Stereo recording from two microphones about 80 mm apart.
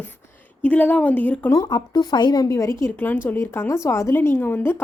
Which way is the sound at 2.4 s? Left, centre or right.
Left.